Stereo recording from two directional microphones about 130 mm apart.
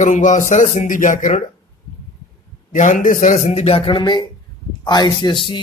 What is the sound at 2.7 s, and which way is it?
Speech, 80° left.